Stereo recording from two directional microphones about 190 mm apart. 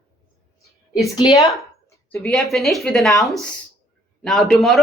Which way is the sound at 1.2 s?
20° left (ahead or behind).